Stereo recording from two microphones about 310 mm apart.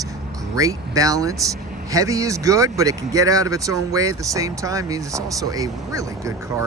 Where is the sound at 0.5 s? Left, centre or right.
Centre.